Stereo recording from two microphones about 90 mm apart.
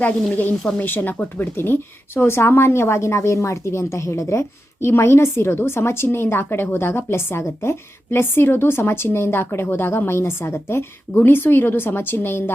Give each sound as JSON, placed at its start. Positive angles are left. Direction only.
{"t": 0.8, "sound": "speech", "side_deg": 20}